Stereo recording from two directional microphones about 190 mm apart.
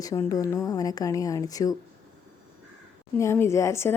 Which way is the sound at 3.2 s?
15° left (ahead or behind).